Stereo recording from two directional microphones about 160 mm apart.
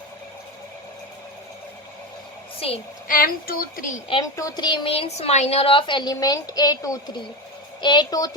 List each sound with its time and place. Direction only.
3.1 s a woman's voice: 65° left (ahead or behind)
4.1 s a woman's voice: 20° left (ahead or behind)